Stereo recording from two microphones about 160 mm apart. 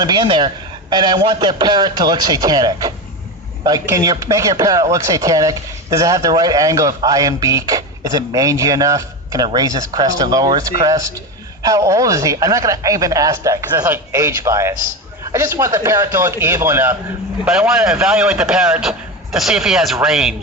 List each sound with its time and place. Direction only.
0.0 s a man's voice: 30° right (ahead or behind); by 20.3 s 5° right (ahead or behind)